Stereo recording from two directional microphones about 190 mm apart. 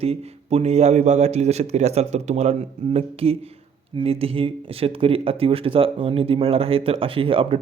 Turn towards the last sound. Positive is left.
turn(degrees=-30)  # may be behind; listen again after turning